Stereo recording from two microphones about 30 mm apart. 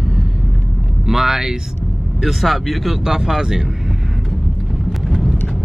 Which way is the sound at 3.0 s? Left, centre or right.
Centre.